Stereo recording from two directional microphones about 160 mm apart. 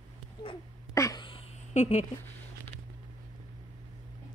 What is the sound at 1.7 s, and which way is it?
Speech, 45° left (ahead or behind).